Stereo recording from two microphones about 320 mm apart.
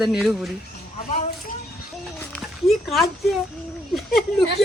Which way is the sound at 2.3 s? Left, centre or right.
Centre.